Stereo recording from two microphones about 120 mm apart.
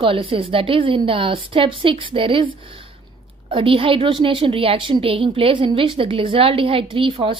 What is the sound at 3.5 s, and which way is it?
A woman's voice, 50° right (ahead or behind).